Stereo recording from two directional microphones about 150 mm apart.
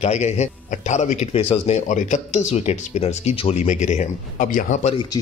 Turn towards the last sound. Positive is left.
turn(degrees=55)  # may be behind; listen again after turning